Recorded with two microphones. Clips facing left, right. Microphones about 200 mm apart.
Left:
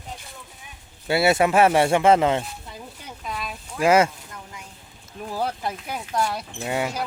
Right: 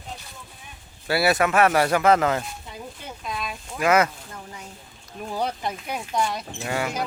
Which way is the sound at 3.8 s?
30° left (ahead or behind).